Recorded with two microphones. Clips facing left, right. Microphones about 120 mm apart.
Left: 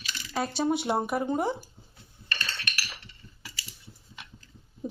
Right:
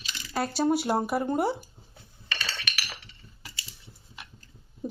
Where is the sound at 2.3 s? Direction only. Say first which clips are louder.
Even; 90° right.